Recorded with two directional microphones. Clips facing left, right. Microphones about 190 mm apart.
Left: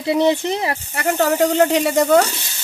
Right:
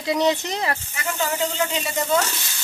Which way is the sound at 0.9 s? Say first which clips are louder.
Left 8 dB; 55° left (ahead or behind).